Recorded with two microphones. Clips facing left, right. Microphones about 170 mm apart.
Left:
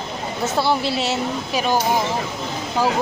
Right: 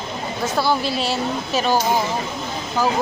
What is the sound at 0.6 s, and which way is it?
Speech, 25° left (ahead or behind).